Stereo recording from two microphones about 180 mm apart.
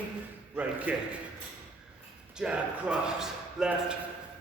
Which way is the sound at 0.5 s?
10° right (ahead or behind).